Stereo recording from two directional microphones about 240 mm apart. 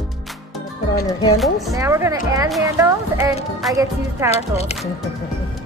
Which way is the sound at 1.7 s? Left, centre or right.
Centre.